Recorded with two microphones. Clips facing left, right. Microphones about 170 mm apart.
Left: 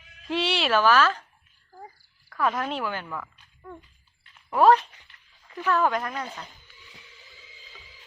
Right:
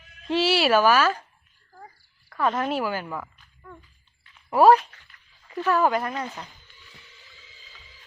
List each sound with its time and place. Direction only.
0.3 s speech: 5° right (ahead or behind)
2.3 s speech: centre (ahead or behind)
3.6 s speech: 20° left (ahead or behind)
4.4 s speech: 10° right (ahead or behind)
4.8 s speech: 15° left (ahead or behind)
5.6 s speech: 10° right (ahead or behind)